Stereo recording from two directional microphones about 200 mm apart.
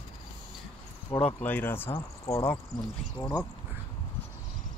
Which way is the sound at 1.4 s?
10° left (ahead or behind).